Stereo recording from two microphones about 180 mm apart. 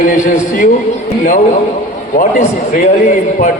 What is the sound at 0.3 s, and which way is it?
Speech, 50° left (ahead or behind).